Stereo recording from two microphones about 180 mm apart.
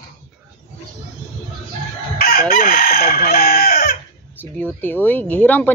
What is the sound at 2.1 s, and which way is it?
Chicken, 60° left (ahead or behind).